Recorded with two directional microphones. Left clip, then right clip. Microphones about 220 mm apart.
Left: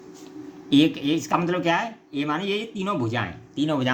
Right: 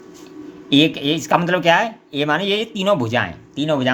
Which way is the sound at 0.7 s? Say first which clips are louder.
Right 4 dB; 15° right (ahead or behind).